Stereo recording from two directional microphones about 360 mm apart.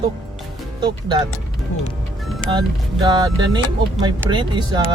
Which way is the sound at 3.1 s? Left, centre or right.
Centre.